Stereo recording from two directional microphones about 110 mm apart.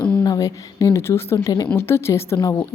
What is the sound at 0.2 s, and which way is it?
A woman's voice, 35° left (ahead or behind).